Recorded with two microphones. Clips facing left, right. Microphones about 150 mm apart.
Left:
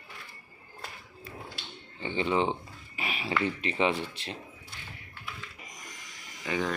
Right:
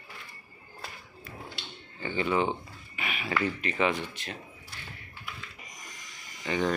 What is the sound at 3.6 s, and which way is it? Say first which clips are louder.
Speech: even; 30° left (ahead or behind).